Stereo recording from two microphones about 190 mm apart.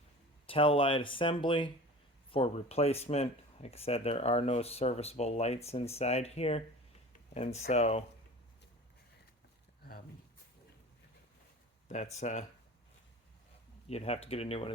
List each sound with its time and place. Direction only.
0.4 s speech: 30° left (ahead or behind)
12.1 s speech: 40° left (ahead or behind)
13.8 s speech: 35° left (ahead or behind)